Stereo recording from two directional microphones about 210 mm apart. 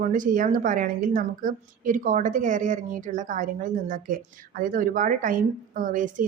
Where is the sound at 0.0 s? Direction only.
40° right (ahead or behind).